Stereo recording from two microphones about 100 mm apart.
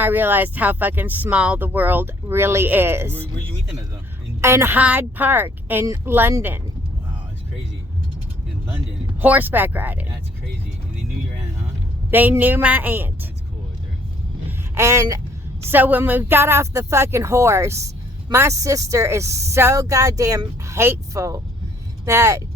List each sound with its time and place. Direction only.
0.0 s speech: 20° right (ahead or behind)
4.4 s a woman's voice: 25° right (ahead or behind)
4.8 s speech: 15° right (ahead or behind)
9.2 s speech: 15° right (ahead or behind)
12.1 s speech: 20° right (ahead or behind)
14.8 s speech: 30° right (ahead or behind)
15.6 s speech: 20° right (ahead or behind)